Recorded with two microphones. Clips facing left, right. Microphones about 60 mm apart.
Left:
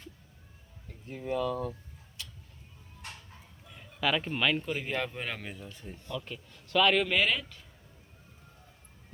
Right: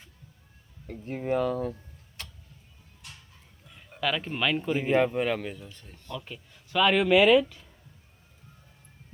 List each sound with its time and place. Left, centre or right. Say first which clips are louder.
0.9 s speech: right 6 dB; right
2.2 s tick-tock: right 3 dB; right
3.0 s a sound: left 4 dB; left
3.8 s speech: even; centre
4.7 s speech: right 9 dB; centre
5.1 s speech: right 10 dB; centre
5.8 s speech: even; centre
6.1 s speech: even; centre